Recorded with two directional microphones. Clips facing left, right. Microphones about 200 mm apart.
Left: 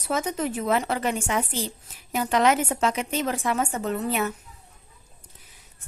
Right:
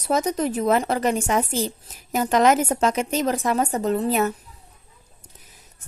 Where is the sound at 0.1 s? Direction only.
40° right (ahead or behind).